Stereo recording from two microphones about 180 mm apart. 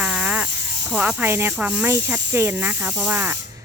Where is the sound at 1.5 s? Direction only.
5° right (ahead or behind).